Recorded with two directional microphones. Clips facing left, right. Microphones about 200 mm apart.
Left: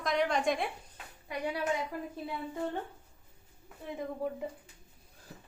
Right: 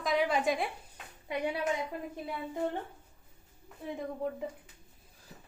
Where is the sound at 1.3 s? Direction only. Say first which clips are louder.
Right 3 dB; 20° right (ahead or behind).